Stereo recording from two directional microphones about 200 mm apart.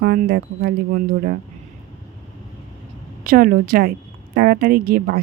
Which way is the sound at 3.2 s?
45° right (ahead or behind).